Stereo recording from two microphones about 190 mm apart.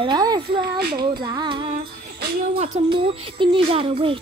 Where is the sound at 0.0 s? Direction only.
20° right (ahead or behind).